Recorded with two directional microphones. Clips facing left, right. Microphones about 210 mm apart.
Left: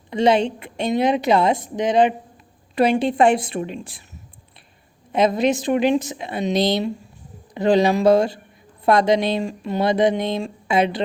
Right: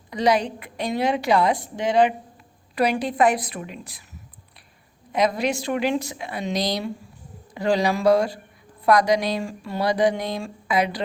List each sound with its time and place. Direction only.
0.1 s speech: 25° left (ahead or behind)
5.1 s speech: 25° left (ahead or behind)